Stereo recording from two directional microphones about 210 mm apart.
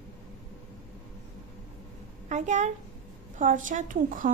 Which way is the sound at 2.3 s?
35° right (ahead or behind).